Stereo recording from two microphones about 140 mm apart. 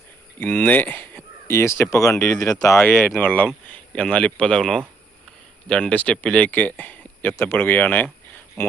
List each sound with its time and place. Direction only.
0.3 s speech: 10° left (ahead or behind)